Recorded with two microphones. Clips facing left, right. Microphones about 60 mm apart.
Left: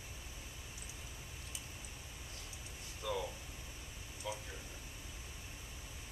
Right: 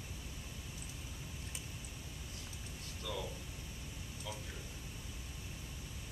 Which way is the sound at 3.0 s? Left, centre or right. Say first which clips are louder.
Left 4 dB; centre.